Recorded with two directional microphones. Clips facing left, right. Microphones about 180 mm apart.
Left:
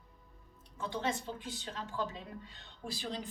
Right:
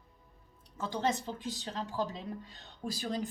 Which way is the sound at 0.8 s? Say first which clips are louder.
Right 3 dB; 40° right (ahead or behind).